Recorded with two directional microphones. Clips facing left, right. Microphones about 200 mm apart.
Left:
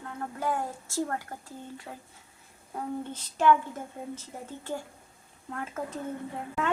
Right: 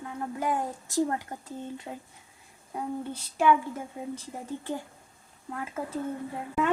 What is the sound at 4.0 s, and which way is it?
A woman's voice, 15° right (ahead or behind).